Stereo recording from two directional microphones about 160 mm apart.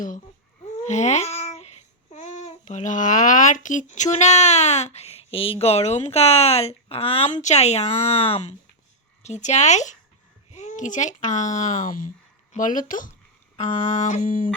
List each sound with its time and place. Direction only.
0.9 s babbling: 45° left (ahead or behind)
2.1 s a child's voice: 50° left (ahead or behind)